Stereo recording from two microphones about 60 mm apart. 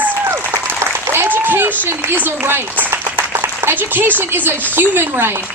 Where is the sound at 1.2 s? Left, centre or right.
Right.